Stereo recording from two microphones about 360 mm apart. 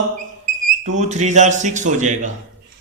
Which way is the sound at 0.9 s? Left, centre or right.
Centre.